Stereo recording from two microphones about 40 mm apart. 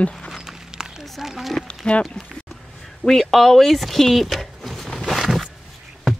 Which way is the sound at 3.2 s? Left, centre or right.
Centre.